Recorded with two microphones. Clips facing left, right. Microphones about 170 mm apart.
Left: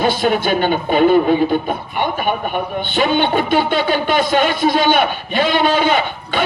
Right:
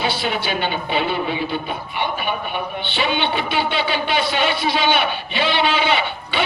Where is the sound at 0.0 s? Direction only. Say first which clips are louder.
Left 7 dB; 45° left (ahead or behind).